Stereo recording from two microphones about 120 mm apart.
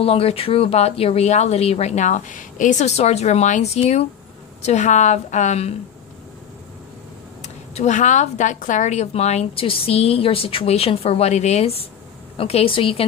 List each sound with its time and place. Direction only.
0.0 s a woman's voice: 55° left (ahead or behind)
4.6 s a woman's voice: 75° left (ahead or behind)
7.4 s a woman's voice: 75° left (ahead or behind); by 13.0 s 50° left (ahead or behind)